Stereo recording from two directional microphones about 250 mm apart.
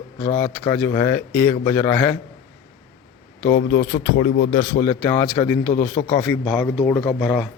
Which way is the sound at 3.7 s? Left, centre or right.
Left.